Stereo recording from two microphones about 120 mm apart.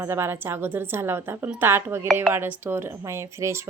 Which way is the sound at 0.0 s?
20° right (ahead or behind).